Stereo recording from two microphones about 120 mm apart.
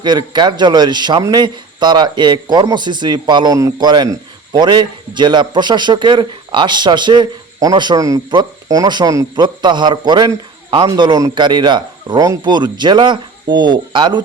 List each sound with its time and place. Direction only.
0.0 s a man's voice: 40° right (ahead or behind)